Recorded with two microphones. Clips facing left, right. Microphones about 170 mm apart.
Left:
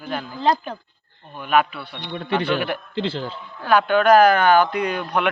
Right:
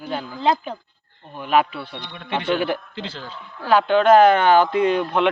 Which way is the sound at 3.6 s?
25° right (ahead or behind).